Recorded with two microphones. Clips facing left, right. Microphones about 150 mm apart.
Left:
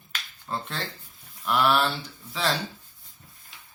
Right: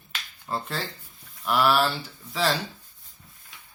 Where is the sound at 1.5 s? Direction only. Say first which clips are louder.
Right 1 dB; centre (ahead or behind).